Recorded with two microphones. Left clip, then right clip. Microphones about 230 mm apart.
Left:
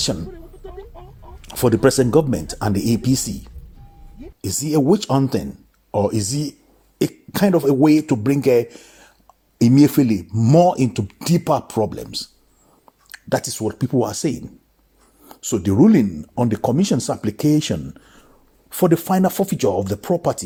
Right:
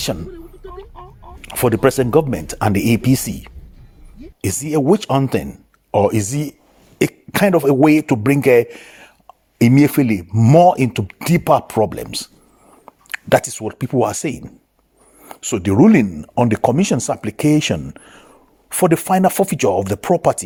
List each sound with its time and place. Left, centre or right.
1.4 s speech: right